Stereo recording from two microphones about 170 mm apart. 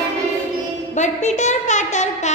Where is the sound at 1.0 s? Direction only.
45° left (ahead or behind).